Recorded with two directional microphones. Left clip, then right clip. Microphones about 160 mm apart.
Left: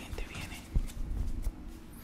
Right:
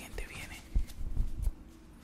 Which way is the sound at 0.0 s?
25° right (ahead or behind).